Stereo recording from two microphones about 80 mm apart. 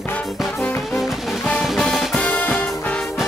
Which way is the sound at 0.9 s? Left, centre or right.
Centre.